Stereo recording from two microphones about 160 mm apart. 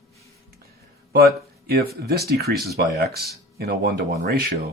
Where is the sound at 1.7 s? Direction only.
75° right (ahead or behind).